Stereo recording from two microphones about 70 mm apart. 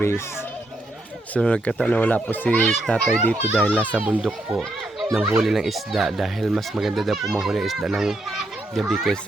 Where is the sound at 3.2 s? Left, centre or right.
Left.